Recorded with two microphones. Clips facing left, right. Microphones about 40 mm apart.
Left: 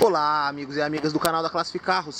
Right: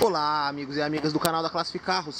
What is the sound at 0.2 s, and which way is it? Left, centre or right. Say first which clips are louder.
Speech: left 3 dB; centre.